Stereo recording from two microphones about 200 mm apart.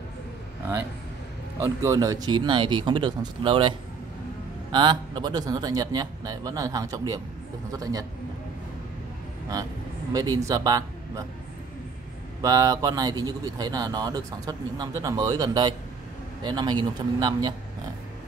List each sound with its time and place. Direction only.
1.6 s a man's voice: 15° right (ahead or behind)
10.1 s speech: 20° right (ahead or behind)
12.4 s speech: 20° right (ahead or behind)